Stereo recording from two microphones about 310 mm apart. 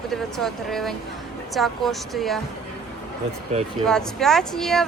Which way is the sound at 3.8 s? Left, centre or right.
Centre.